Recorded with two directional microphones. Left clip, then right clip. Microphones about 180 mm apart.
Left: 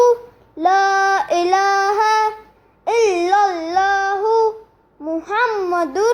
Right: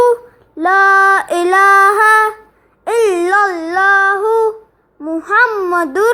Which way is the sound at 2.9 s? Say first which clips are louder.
Right 3 dB; 50° right (ahead or behind).